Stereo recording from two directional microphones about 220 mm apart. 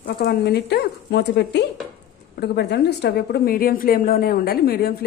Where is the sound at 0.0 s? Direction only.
45° left (ahead or behind).